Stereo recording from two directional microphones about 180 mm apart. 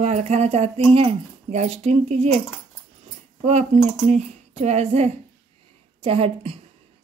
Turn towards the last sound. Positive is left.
turn(degrees=-30)  # may be behind; listen again after turning